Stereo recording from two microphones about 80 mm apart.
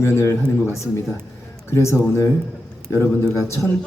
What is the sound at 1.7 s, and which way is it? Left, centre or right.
Speech, left.